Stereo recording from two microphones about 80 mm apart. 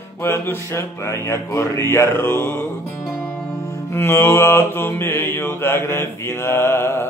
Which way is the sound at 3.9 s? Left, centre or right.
Left.